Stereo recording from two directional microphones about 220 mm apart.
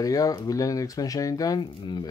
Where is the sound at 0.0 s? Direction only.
15° left (ahead or behind).